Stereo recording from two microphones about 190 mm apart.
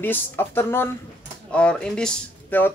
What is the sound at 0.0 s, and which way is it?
Speech, 10° left (ahead or behind).